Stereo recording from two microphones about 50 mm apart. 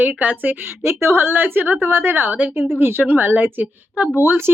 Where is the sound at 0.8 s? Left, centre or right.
Right.